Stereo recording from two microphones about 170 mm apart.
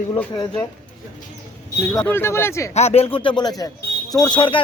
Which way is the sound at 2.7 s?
40° left (ahead or behind).